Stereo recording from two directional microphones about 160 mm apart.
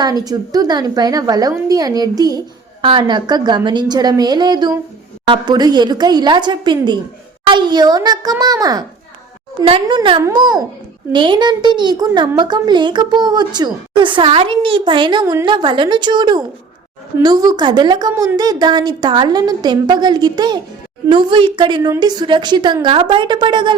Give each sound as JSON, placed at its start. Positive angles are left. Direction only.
{"t": 0.0, "sound": "a woman's voice", "side_deg": -25}
{"t": 9.8, "sound": "a woman's voice", "side_deg": -30}
{"t": 18.1, "sound": "speech", "side_deg": -15}
{"t": 18.3, "sound": "a woman's voice", "side_deg": -25}